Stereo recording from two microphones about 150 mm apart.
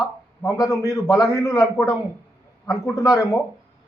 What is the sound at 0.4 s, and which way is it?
A man's voice, 20° left (ahead or behind).